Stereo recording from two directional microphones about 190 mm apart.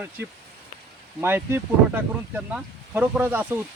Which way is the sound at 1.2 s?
10° right (ahead or behind).